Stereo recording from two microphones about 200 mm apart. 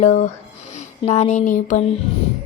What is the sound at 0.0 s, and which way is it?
A woman's voice, 35° left (ahead or behind).